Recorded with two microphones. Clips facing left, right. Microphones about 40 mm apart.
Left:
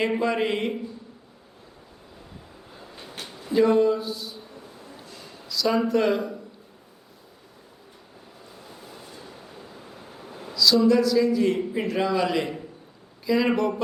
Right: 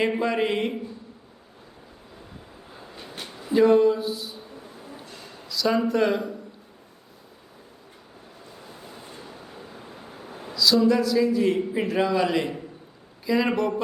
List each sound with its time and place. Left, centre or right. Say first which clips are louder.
0.2 s a man's voice: even; centre
2.8 s train: right 1 dB; centre
3.3 s a sound: right 2 dB; centre
5.0 s a sound: right 1 dB; right
5.5 s a man's voice: even; centre
8.6 s train: right 1 dB; centre
9.0 s vehicle: right 1 dB; right
9.3 s waves: right 1 dB; centre
9.8 s a sound: right 1 dB; centre
10.6 s a man's voice: left 1 dB; centre